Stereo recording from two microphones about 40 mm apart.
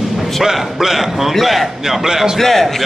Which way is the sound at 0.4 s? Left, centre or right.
Centre.